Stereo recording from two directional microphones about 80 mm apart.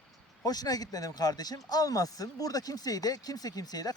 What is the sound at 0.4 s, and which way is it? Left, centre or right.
Speech, left.